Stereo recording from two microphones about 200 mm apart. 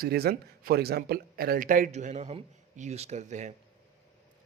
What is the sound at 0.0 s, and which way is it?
Speech, 50° right (ahead or behind).